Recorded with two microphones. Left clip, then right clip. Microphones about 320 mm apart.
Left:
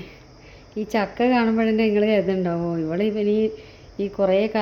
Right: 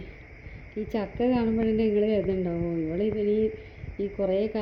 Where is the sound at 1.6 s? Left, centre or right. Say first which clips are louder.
Left 5 dB; centre.